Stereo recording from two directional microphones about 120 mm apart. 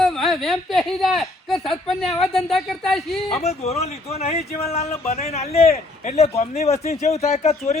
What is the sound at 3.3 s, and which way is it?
Speech, 60° left (ahead or behind).